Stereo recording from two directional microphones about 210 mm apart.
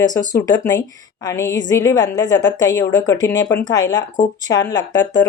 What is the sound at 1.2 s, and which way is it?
A woman's voice, 15° left (ahead or behind).